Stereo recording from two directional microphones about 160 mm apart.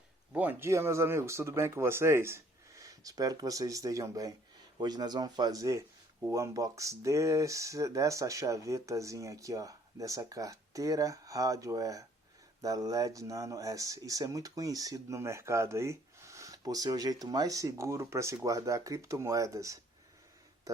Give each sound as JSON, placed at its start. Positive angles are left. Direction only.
{"t": 0.3, "sound": "speech", "side_deg": -15}